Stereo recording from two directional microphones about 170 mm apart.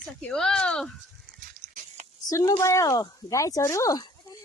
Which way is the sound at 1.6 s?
45° right (ahead or behind).